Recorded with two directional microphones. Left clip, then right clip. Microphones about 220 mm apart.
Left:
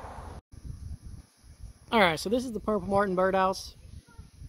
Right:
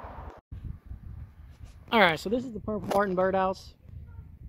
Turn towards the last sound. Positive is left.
turn(degrees=10)  # may be behind; listen again after turning